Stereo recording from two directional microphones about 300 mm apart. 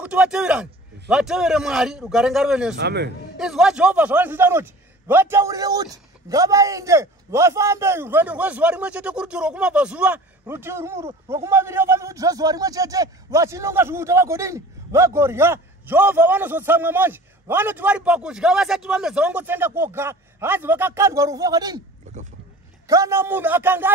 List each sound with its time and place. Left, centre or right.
0.0 s a man's voice: centre
2.8 s a man's voice: right
3.3 s a man's voice: centre
22.1 s boat: right
22.8 s a man's voice: centre